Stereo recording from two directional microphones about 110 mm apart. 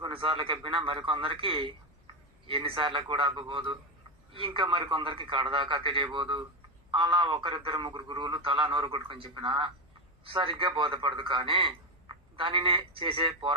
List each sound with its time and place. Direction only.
0.0 s a man's voice: 50° right (ahead or behind)